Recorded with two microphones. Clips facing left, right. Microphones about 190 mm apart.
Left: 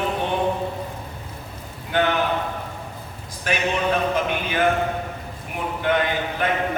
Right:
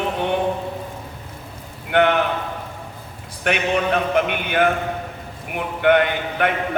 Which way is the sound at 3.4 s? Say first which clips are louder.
Right 3 dB; 65° right (ahead or behind).